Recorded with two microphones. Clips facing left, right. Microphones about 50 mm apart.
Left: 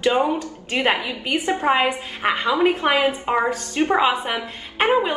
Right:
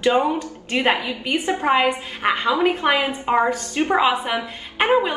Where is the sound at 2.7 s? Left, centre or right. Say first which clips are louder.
Even; right.